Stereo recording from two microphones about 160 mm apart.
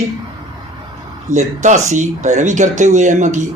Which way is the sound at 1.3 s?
45° right (ahead or behind).